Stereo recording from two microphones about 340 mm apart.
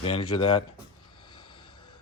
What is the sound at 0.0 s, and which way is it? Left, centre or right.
Speech, centre.